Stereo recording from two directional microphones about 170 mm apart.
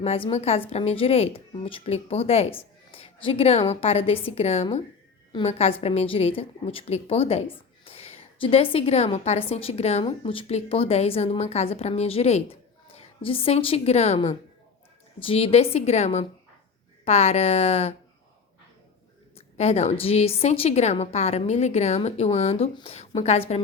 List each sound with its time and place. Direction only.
0.0 s a woman's voice: 35° left (ahead or behind)
19.5 s a woman's voice: 40° left (ahead or behind)